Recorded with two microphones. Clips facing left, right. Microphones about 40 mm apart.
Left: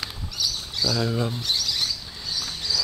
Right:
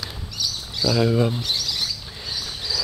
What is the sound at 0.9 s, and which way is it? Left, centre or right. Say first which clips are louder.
Speech: right 9 dB; centre.